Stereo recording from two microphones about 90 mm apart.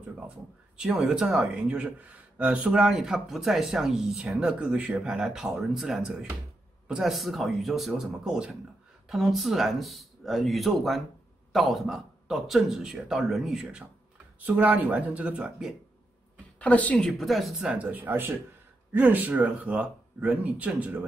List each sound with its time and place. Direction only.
0.7 s speech: 10° right (ahead or behind)
14.4 s speech: 20° right (ahead or behind)
16.5 s speech: 15° left (ahead or behind)
17.0 s speech: centre (ahead or behind)
17.6 s speech: 15° right (ahead or behind)